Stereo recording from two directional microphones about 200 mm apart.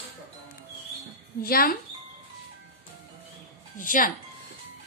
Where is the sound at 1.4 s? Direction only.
45° left (ahead or behind).